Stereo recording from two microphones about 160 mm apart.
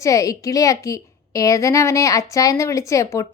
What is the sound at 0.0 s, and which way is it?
A woman's voice, 20° left (ahead or behind).